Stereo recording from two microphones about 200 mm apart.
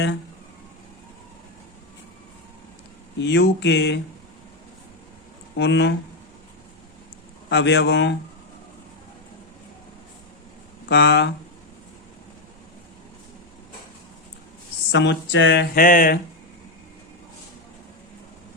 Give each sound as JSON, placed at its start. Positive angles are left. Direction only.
{"t": 3.2, "sound": "speech", "side_deg": 60}
{"t": 5.5, "sound": "speech", "side_deg": 60}
{"t": 7.5, "sound": "speech", "side_deg": 60}
{"t": 10.8, "sound": "speech", "side_deg": 60}
{"t": 14.9, "sound": "speech", "side_deg": 65}
{"t": 15.7, "sound": "a sound", "side_deg": 45}